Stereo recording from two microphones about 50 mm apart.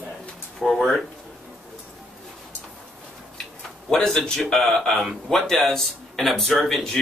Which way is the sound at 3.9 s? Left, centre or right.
Centre.